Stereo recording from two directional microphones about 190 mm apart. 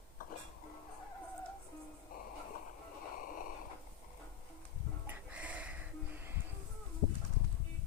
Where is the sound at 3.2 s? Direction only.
45° left (ahead or behind).